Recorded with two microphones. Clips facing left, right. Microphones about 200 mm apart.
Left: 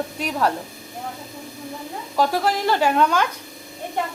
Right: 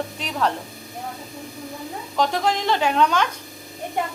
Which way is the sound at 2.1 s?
5° left (ahead or behind).